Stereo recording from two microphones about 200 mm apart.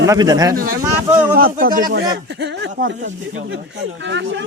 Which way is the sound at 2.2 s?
60° right (ahead or behind).